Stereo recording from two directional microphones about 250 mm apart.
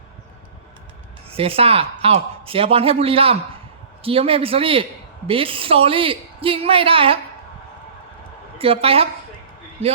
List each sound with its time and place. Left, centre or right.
1.3 s speech: right
8.5 s speech: right